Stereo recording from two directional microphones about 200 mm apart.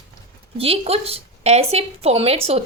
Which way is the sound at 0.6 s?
30° right (ahead or behind).